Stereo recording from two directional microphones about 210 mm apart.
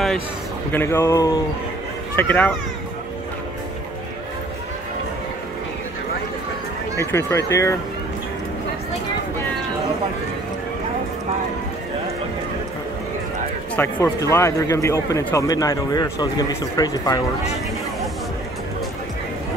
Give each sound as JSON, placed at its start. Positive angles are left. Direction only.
{"t": 0.7, "sound": "speech", "side_deg": 10}
{"t": 7.0, "sound": "speech", "side_deg": 10}
{"t": 13.9, "sound": "speech", "side_deg": 15}